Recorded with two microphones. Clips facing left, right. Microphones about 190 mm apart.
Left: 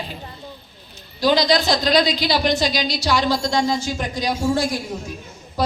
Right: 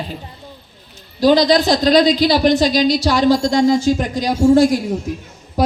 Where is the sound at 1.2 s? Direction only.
40° right (ahead or behind).